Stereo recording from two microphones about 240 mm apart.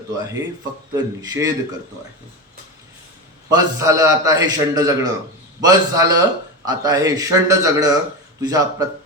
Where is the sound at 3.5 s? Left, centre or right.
Centre.